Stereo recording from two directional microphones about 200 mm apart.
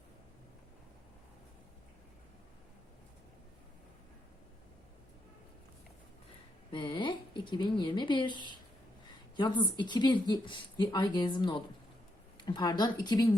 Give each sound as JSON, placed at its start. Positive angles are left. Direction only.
{"t": 6.7, "sound": "a woman's voice", "side_deg": 25}